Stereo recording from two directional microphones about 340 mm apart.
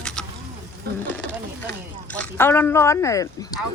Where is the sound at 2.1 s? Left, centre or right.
Centre.